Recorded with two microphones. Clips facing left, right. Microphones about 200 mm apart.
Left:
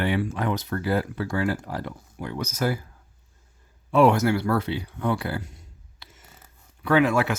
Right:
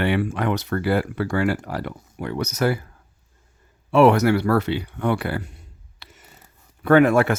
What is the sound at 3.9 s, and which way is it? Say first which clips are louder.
Speech: right 4 dB; 70° right (ahead or behind).